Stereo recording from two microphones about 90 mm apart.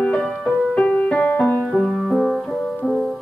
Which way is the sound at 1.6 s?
5° right (ahead or behind).